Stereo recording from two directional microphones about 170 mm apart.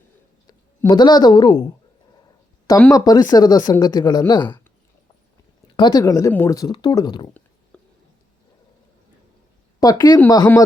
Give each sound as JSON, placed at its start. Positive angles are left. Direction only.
{"t": 0.4, "sound": "speech", "side_deg": 25}
{"t": 2.9, "sound": "speech", "side_deg": 20}
{"t": 5.7, "sound": "speech", "side_deg": 25}
{"t": 7.7, "sound": "a sound", "side_deg": 5}
{"t": 9.8, "sound": "speech", "side_deg": 20}